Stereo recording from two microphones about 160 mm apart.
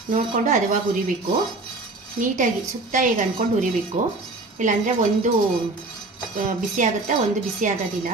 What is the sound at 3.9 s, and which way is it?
Speech, 50° right (ahead or behind).